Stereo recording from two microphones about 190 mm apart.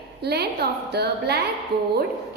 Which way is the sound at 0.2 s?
60° right (ahead or behind).